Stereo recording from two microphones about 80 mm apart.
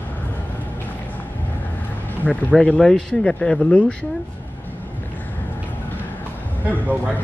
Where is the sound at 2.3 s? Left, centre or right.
Centre.